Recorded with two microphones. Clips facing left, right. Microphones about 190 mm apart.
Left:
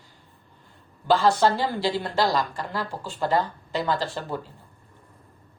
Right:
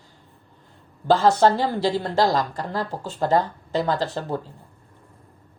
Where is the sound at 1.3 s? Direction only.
45° right (ahead or behind).